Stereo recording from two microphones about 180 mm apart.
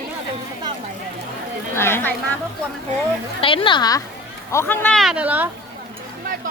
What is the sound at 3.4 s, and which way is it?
Speech, 30° left (ahead or behind).